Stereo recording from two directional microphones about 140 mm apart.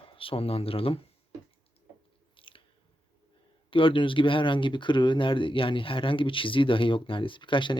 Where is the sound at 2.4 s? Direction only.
40° left (ahead or behind).